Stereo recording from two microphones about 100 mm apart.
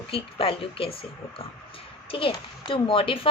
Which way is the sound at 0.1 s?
65° left (ahead or behind).